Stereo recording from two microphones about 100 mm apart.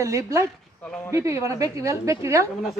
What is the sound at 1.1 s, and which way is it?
A woman's voice, 30° right (ahead or behind).